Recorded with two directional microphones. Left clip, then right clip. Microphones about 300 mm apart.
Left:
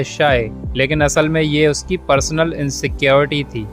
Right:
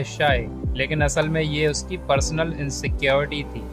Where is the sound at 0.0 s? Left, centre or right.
Centre.